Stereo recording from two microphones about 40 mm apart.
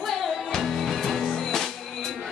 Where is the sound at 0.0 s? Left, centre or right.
Centre.